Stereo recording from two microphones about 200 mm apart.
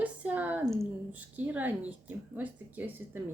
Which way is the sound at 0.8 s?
10° right (ahead or behind).